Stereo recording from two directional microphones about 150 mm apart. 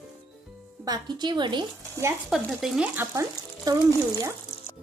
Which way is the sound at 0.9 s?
30° right (ahead or behind).